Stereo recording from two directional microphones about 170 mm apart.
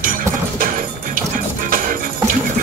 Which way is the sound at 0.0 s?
50° right (ahead or behind).